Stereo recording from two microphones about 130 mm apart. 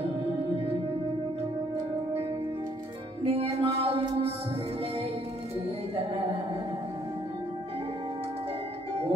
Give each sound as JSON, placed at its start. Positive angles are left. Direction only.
{"t": 3.3, "sound": "music", "side_deg": -50}